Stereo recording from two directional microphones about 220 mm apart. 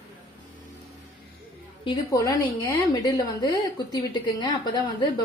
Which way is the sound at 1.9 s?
15° left (ahead or behind).